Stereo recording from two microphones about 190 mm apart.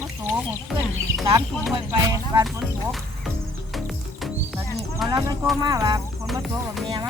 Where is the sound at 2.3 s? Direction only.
15° right (ahead or behind).